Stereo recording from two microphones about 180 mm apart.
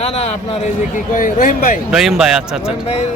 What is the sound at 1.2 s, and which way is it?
Speech, 50° left (ahead or behind).